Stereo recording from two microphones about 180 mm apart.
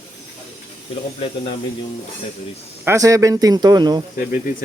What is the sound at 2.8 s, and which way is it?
Speech, 15° right (ahead or behind).